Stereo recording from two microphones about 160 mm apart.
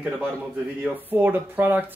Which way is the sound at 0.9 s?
10° right (ahead or behind).